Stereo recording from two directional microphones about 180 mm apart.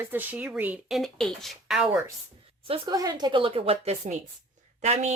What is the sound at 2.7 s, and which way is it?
A woman's voice, 20° right (ahead or behind).